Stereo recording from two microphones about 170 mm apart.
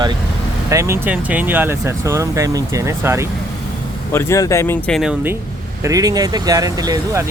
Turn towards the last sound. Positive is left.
turn(degrees=-20)  # may be behind; listen again after turning